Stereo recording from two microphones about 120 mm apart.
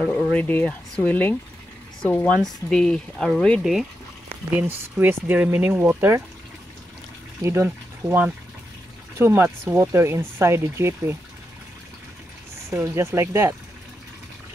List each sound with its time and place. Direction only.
0.1 s speech: 10° left (ahead or behind)
4.6 s speech: 15° right (ahead or behind)
7.4 s speech: 25° right (ahead or behind)
12.6 s speech: 20° right (ahead or behind)